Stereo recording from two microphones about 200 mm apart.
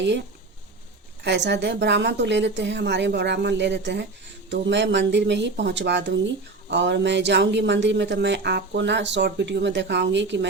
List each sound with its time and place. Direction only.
1.2 s speech: 60° right (ahead or behind)